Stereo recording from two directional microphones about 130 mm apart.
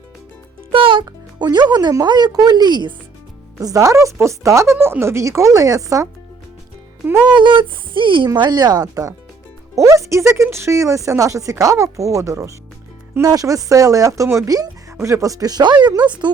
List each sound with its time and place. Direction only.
0.7 s music: 40° right (ahead or behind)
1.0 s speech: 30° right (ahead or behind)
7.3 s speech: 35° right (ahead or behind)